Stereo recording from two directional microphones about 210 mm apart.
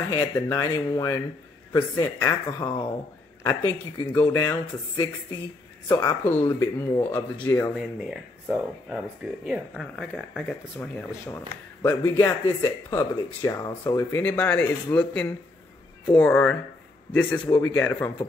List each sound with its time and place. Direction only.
0.1 s speech: 10° left (ahead or behind)
7.7 s speech: 5° right (ahead or behind); by 18.1 s 10° left (ahead or behind)